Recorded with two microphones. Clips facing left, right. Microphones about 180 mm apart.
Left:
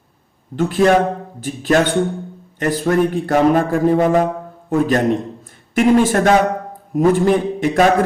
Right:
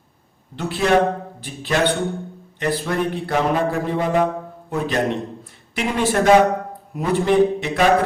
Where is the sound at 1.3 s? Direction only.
45° left (ahead or behind).